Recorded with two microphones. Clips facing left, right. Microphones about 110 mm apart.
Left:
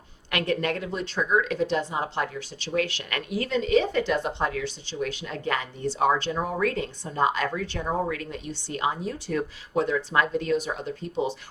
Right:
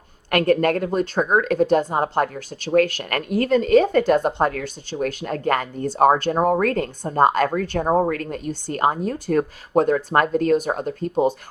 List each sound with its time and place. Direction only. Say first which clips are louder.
0.3 s speech: right 9 dB; 50° right (ahead or behind)